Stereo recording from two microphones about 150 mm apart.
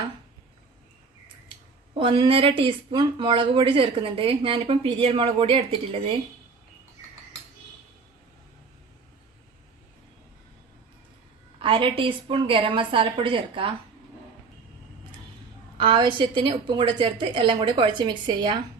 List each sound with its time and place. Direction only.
2.0 s speech: 35° right (ahead or behind)
11.6 s speech: 35° right (ahead or behind)
15.8 s speech: 35° right (ahead or behind)